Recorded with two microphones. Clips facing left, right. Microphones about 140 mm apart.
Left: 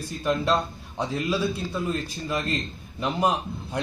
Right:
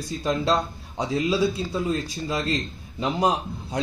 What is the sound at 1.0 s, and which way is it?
A man's voice, 20° right (ahead or behind).